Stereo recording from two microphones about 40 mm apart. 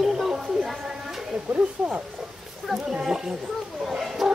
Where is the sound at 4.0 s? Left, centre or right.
Centre.